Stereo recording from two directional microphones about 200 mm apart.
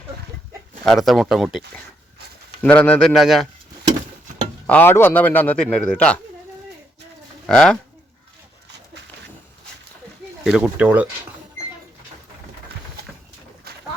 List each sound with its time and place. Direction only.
0.9 s speech: centre (ahead or behind)
4.6 s a man's voice: 10° left (ahead or behind)
7.4 s speech: 5° left (ahead or behind)
10.4 s speech: 5° right (ahead or behind)
13.7 s boat: 50° right (ahead or behind)